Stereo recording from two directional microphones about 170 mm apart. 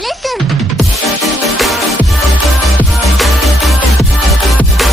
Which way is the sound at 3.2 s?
Centre (ahead or behind).